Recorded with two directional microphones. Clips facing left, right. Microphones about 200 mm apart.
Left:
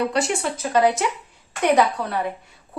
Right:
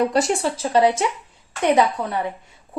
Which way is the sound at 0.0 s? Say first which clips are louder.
Right 3 dB; 40° right (ahead or behind).